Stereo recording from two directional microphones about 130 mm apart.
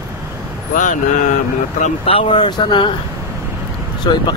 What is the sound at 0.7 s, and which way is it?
Speech, 90° left.